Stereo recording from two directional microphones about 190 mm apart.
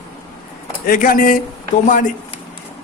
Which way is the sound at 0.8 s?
50° left (ahead or behind).